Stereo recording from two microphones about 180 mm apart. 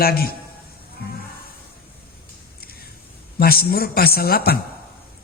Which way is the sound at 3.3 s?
55° left (ahead or behind).